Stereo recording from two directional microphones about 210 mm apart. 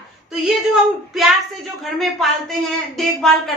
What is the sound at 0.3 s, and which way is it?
Speech, centre (ahead or behind).